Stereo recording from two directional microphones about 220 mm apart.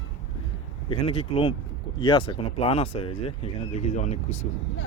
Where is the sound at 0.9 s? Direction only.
25° left (ahead or behind).